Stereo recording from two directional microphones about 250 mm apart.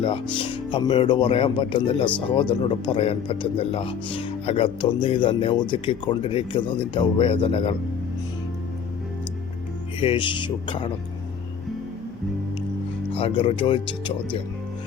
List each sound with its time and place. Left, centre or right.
0.0 s speech: centre
10.0 s speech: centre
13.1 s speech: left